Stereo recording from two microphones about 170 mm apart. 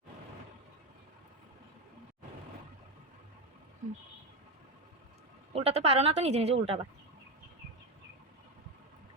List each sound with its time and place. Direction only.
3.8 s speech: 45° right (ahead or behind)
5.5 s a woman's voice: 35° right (ahead or behind)